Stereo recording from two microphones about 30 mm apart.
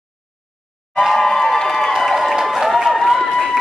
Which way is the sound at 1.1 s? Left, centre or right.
Centre.